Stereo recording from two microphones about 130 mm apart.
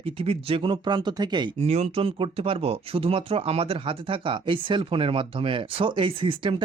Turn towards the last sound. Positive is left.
turn(degrees=-40)  # may be behind; listen again after turning